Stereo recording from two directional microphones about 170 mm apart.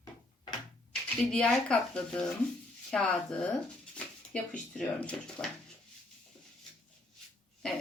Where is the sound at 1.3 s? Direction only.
5° left (ahead or behind).